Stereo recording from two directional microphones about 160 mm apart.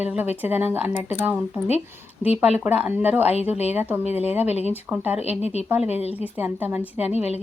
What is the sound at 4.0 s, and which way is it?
Speech, 40° left (ahead or behind).